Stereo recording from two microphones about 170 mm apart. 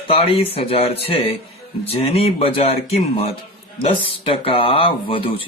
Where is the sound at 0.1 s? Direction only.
35° left (ahead or behind).